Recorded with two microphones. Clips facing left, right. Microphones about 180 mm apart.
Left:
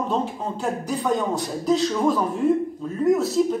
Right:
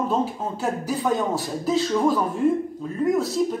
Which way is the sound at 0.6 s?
5° right (ahead or behind).